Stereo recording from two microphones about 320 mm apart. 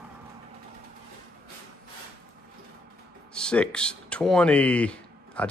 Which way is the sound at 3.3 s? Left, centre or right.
Centre.